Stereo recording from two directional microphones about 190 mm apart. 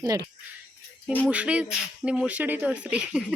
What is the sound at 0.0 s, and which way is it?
Speech, 20° right (ahead or behind).